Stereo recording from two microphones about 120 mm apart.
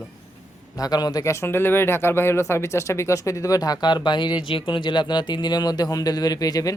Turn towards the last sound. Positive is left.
turn(degrees=30)  # may be behind; listen again after turning